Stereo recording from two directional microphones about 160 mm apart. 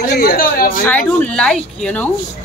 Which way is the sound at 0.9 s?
10° left (ahead or behind).